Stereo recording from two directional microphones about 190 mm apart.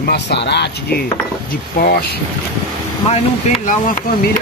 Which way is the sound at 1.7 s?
55° left (ahead or behind).